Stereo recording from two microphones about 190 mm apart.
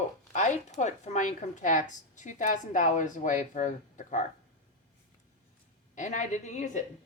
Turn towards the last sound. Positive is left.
turn(degrees=40)  # may be behind; listen again after turning